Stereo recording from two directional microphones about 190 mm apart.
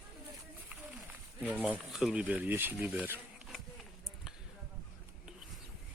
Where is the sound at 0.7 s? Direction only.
10° right (ahead or behind).